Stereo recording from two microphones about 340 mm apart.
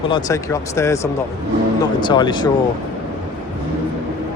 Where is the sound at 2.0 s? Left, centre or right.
Centre.